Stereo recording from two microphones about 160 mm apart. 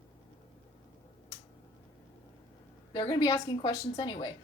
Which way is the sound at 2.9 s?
25° left (ahead or behind).